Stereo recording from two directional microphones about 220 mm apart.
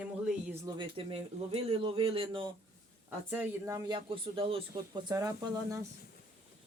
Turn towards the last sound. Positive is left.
turn(degrees=-15)  # may be behind; listen again after turning